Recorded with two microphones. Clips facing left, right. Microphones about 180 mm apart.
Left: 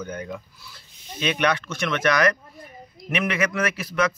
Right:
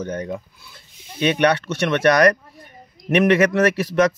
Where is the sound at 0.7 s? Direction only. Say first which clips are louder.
Left 1 dB; 25° right (ahead or behind).